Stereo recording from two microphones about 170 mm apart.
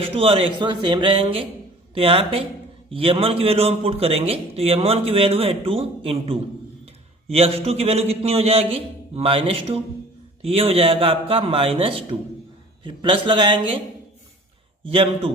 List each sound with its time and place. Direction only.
0.0 s a man's voice: 35° right (ahead or behind)
14.8 s a man's voice: 35° right (ahead or behind)